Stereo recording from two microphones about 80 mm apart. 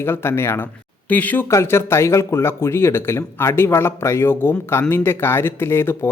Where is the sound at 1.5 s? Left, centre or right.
Left.